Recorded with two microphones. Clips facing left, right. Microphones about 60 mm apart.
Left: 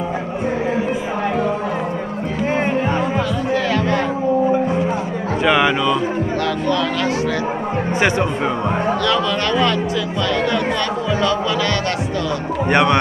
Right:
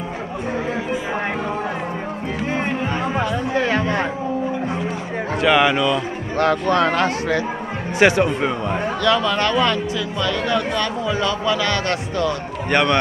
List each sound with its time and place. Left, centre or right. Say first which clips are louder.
3.5 s music: left 1 dB; right
5.4 s speech: even; centre
6.4 s speech: right 6 dB; right
8.0 s speech: right 4 dB; centre
9.0 s speech: even; centre
11.1 s speech: left 3 dB; centre
12.6 s speech: left 3 dB; centre